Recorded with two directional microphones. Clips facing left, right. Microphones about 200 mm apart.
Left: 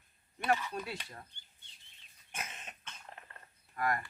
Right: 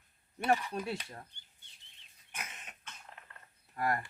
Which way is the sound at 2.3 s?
30° left (ahead or behind).